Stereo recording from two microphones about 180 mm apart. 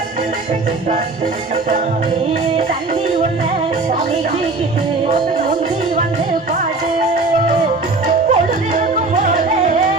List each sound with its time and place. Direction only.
8.0 s music: 45° right (ahead or behind)